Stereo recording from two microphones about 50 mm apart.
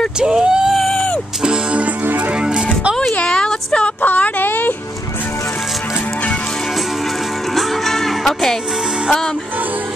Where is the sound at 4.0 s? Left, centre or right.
Left.